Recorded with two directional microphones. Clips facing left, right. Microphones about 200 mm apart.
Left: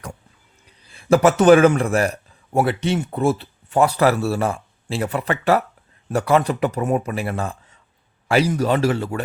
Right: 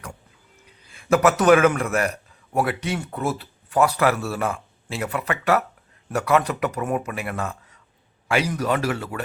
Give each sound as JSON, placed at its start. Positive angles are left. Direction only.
{"t": 0.9, "sound": "a man's voice", "side_deg": 30}